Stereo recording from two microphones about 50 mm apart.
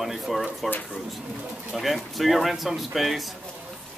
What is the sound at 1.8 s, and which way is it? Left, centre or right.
Speech, centre.